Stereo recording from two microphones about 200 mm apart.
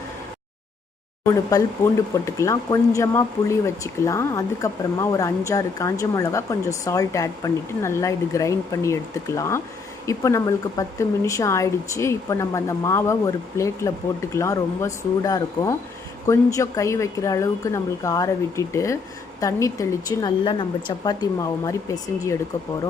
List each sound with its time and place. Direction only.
1.2 s speech: 15° left (ahead or behind)